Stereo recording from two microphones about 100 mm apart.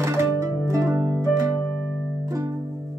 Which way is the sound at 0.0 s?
25° right (ahead or behind).